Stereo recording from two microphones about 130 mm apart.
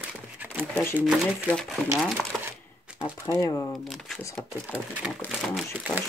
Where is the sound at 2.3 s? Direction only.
Centre (ahead or behind).